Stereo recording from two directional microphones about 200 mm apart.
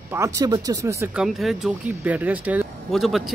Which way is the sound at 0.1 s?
15° right (ahead or behind).